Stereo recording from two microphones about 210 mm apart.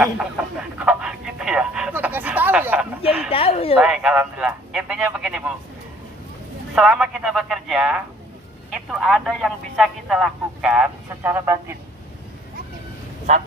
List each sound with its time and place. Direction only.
0.0 s telephone: 5° right (ahead or behind)
3.3 s speech: 25° left (ahead or behind)
3.7 s speech: 5° right (ahead or behind)
6.7 s speech: 5° right (ahead or behind)